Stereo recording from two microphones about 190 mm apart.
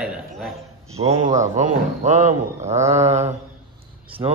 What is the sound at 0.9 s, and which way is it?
Speech, 30° right (ahead or behind).